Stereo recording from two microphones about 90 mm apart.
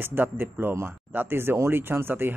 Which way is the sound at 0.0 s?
25° right (ahead or behind).